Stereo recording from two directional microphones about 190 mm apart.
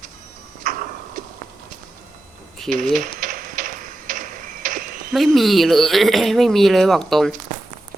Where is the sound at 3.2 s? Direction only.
45° right (ahead or behind).